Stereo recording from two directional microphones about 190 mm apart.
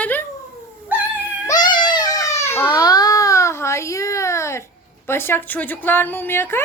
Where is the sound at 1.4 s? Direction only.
20° left (ahead or behind).